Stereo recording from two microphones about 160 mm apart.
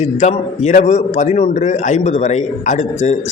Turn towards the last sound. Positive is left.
turn(degrees=45)  # may be behind; listen again after turning